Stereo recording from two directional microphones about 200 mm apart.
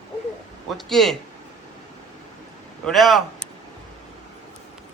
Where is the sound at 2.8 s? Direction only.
Centre (ahead or behind).